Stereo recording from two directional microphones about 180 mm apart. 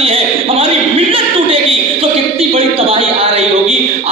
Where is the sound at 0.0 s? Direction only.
30° right (ahead or behind).